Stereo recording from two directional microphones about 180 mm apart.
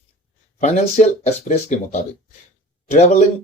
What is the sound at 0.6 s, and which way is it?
Speech, 40° left (ahead or behind).